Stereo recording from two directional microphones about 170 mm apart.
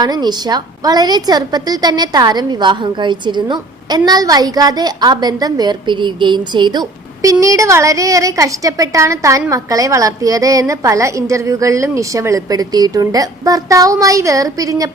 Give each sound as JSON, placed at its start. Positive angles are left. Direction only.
{"t": 0.0, "sound": "a woman's voice", "side_deg": -25}